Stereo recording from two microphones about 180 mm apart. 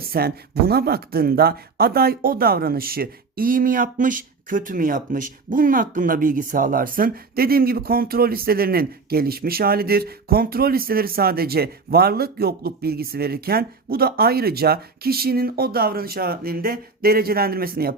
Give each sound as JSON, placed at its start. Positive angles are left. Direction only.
{"t": 0.1, "sound": "speech", "side_deg": -60}